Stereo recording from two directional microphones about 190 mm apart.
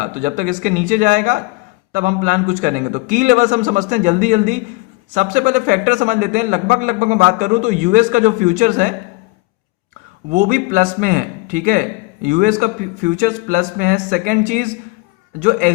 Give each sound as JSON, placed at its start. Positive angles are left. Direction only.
{"t": 0.0, "sound": "speech", "side_deg": -45}
{"t": 10.2, "sound": "speech", "side_deg": -45}